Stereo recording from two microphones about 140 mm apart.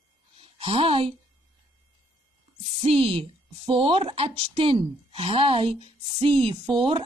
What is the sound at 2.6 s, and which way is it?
A woman's voice, 55° right (ahead or behind).